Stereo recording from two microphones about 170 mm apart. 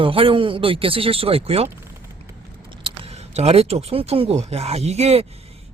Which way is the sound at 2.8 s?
35° right (ahead or behind).